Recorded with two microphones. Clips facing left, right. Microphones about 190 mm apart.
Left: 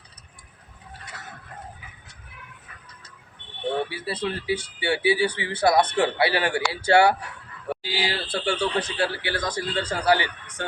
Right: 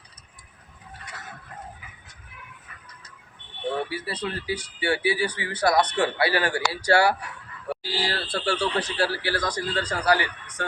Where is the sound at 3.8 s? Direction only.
25° left (ahead or behind).